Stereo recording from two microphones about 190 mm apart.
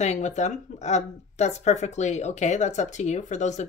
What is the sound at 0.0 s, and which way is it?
Speech, 35° left (ahead or behind).